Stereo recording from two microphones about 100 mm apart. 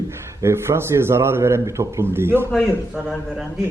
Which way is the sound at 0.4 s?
25° right (ahead or behind).